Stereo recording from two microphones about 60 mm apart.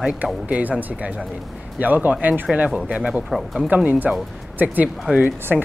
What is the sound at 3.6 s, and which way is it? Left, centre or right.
Speech, right.